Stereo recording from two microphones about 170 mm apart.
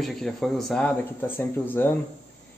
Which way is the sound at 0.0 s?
Centre (ahead or behind).